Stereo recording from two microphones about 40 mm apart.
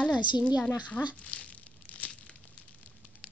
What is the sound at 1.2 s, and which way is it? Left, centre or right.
Tearing, left.